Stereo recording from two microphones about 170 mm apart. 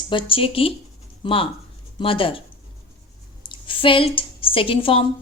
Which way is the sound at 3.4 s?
30° left (ahead or behind).